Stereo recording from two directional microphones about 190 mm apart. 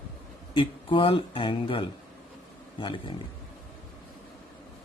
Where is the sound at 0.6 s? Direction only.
25° left (ahead or behind).